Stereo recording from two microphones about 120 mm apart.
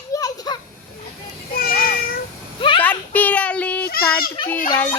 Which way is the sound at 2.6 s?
45° left (ahead or behind).